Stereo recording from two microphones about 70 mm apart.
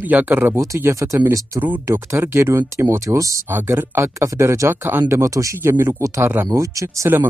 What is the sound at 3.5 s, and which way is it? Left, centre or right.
Speech, right.